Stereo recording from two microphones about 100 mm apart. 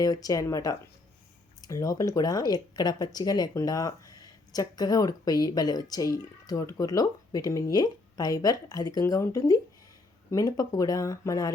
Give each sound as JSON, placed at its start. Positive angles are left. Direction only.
{"t": 0.0, "sound": "speech", "side_deg": 40}